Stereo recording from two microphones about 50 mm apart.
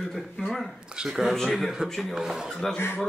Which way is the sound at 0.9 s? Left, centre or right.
Centre.